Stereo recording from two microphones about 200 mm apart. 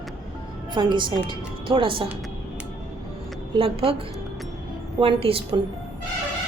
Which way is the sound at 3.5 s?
30° right (ahead or behind).